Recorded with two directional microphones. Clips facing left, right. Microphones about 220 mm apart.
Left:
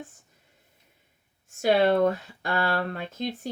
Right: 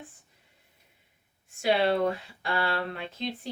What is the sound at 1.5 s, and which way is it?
Speech, 45° left (ahead or behind).